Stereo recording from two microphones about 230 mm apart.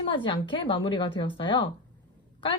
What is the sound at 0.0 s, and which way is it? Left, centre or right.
Speech, left.